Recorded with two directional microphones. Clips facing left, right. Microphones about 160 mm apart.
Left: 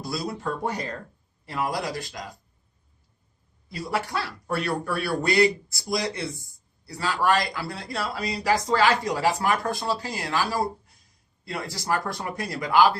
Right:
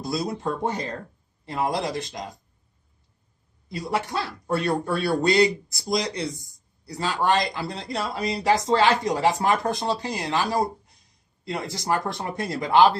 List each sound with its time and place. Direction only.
0.0 s speech: 20° right (ahead or behind)
3.7 s speech: 20° right (ahead or behind)